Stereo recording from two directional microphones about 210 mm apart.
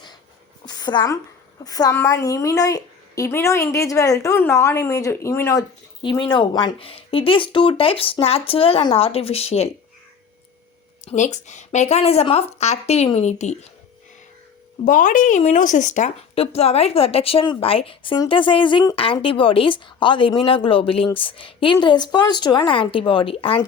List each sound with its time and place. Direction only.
0.6 s a sound: 20° left (ahead or behind)
1.6 s a woman's voice: 15° left (ahead or behind)
11.0 s speech: 35° left (ahead or behind)
14.8 s speech: 40° left (ahead or behind)